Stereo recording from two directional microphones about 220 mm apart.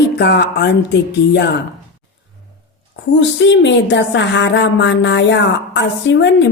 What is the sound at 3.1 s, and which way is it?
Speech, 55° left (ahead or behind).